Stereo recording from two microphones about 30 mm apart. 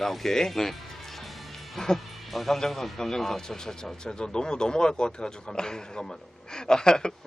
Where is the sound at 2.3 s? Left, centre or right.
Centre.